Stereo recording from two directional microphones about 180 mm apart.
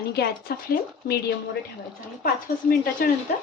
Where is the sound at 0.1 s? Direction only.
60° left (ahead or behind).